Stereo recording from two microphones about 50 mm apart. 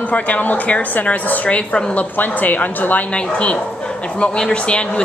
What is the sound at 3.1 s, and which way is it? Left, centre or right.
A woman's voice, left.